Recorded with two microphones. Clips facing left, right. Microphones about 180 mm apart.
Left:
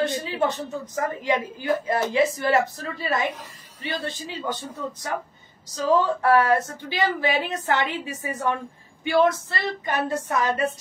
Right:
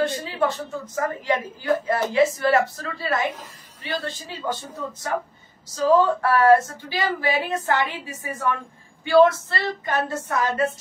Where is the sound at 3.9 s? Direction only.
20° left (ahead or behind).